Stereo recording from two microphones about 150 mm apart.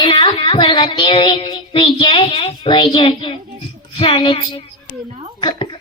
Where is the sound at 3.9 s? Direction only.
35° left (ahead or behind).